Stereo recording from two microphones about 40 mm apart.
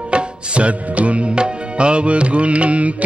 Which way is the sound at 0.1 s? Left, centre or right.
Right.